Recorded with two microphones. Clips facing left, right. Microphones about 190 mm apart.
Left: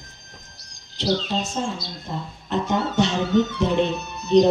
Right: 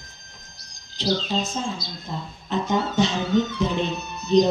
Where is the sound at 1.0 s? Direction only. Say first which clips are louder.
Left 1 dB; 65° left (ahead or behind).